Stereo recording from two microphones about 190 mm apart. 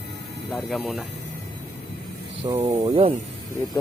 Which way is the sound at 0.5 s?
Centre (ahead or behind).